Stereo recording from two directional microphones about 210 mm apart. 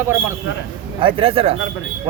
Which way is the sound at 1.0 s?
25° right (ahead or behind).